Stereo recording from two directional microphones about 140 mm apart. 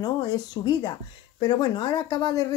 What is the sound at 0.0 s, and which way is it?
Speech, 30° left (ahead or behind).